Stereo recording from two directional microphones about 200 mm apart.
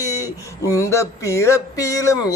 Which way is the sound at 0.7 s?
15° left (ahead or behind).